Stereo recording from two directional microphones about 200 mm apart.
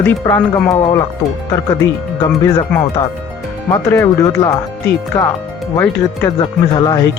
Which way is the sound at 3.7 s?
15° left (ahead or behind).